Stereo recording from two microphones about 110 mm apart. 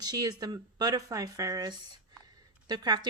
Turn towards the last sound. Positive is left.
turn(degrees=-40)  # may be behind; listen again after turning